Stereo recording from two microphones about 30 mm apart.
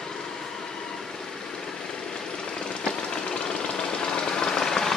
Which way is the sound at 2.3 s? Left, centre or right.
Left.